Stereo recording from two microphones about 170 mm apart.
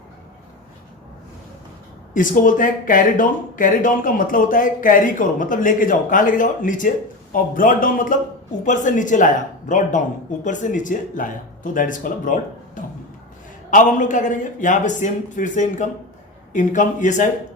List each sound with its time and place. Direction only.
2.1 s speech: 50° left (ahead or behind)
13.7 s speech: 50° left (ahead or behind)